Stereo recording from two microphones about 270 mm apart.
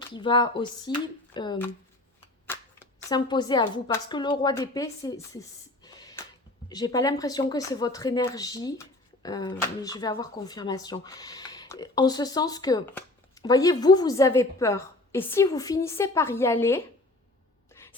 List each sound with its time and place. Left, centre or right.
0.1 s speech: centre
5.8 s a sound: centre
6.7 s speech: centre